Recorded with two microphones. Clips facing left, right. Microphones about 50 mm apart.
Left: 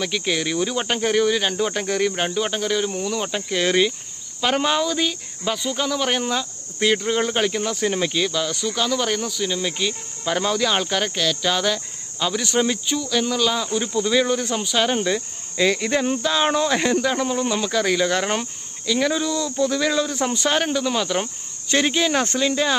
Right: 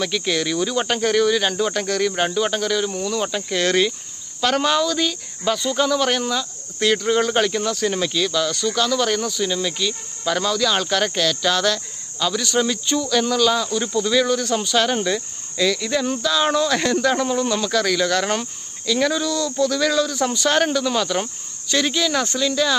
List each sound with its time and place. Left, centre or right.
0.0 s speech: centre
6.2 s speech: left; by 9.6 s centre
9.6 s speech: left
10.7 s speech: centre
12.2 s speech: left
12.8 s speech: centre
13.7 s speech: left
14.5 s speech: centre
15.5 s speech: left; by 19.2 s centre
19.2 s speech: left
20.5 s speech: centre
21.7 s speech: left